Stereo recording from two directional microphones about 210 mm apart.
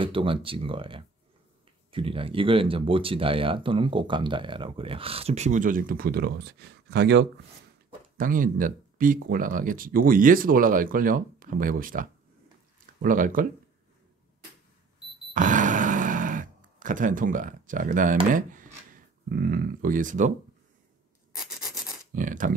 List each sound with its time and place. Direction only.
0.0 s speech: 25° right (ahead or behind); by 7.2 s 55° right (ahead or behind)
8.2 s speech: 40° right (ahead or behind)
15.3 s a sound: 35° right (ahead or behind)
18.3 s speech: 40° right (ahead or behind)
21.4 s rub: centre (ahead or behind)
22.1 s speech: 40° right (ahead or behind)